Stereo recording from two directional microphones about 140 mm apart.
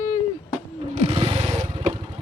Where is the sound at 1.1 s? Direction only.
40° right (ahead or behind).